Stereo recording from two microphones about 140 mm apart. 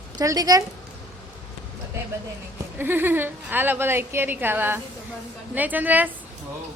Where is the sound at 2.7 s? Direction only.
15° right (ahead or behind).